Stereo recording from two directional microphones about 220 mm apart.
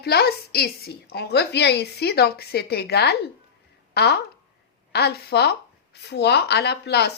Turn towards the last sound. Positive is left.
turn(degrees=50)  # may be behind; listen again after turning